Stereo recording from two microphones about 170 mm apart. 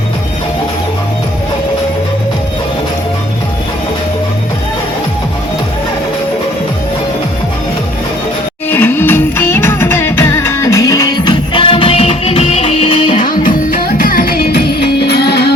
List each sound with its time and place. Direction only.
8.7 s music: 10° left (ahead or behind); by 13.2 s 40° left (ahead or behind)
13.2 s music: 55° left (ahead or behind); by 15.4 s 75° left (ahead or behind)